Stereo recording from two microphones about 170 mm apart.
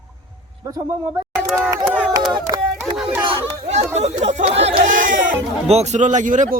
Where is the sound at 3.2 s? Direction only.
35° right (ahead or behind).